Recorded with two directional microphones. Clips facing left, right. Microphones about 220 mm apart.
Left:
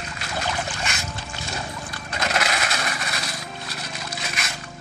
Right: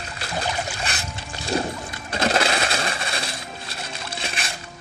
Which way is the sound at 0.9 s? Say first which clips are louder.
Right 1 dB; 35° right (ahead or behind).